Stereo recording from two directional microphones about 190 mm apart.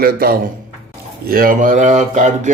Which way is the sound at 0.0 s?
50° right (ahead or behind).